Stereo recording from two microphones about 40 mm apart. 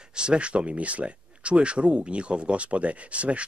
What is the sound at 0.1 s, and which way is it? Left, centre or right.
Speech, right.